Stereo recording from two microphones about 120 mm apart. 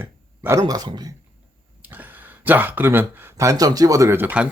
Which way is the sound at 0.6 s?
30° right (ahead or behind).